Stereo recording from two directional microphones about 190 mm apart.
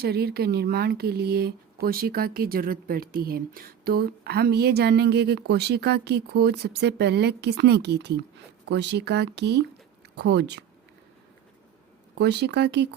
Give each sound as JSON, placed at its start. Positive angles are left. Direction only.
{"t": 0.0, "sound": "speech", "side_deg": -55}
{"t": 12.1, "sound": "speech", "side_deg": -60}